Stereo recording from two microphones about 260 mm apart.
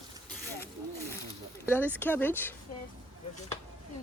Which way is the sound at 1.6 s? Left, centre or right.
Centre.